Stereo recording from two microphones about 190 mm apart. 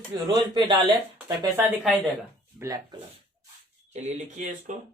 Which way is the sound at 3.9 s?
40° right (ahead or behind).